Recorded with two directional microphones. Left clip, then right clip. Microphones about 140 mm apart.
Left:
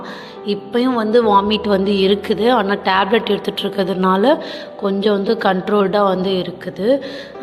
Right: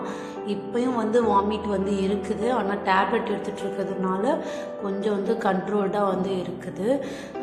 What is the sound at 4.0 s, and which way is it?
Speech, 90° left.